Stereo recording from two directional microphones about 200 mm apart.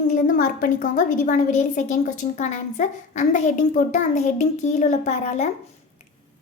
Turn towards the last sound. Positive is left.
turn(degrees=35)  # may be behind; listen again after turning